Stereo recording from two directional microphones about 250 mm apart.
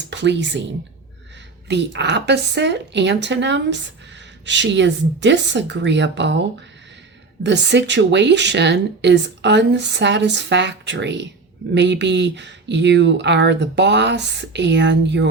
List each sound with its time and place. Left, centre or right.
0.1 s a woman's voice: right
1.6 s speech: right
7.4 s speech: right